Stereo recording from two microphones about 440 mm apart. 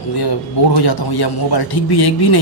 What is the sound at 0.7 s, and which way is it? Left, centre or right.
A man's voice, left.